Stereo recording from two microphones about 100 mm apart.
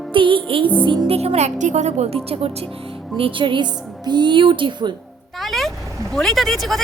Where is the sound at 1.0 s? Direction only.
85° right.